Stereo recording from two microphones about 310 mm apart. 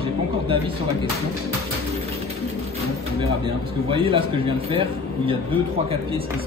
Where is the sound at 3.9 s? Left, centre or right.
Centre.